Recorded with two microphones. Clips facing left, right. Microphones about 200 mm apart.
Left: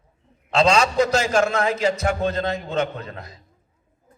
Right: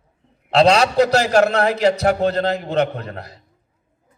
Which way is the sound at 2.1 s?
65° right (ahead or behind).